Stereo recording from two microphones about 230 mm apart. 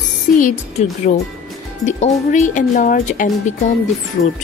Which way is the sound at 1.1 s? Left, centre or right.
Left.